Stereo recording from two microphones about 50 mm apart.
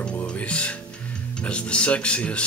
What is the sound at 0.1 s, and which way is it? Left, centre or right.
Music, left.